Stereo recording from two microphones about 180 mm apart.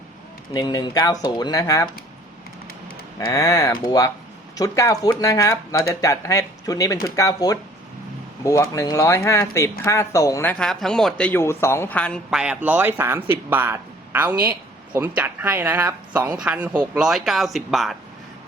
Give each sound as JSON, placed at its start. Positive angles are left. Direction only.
{"t": 0.5, "sound": "speech", "side_deg": 20}
{"t": 3.2, "sound": "speech", "side_deg": 20}
{"t": 12.3, "sound": "speech", "side_deg": -5}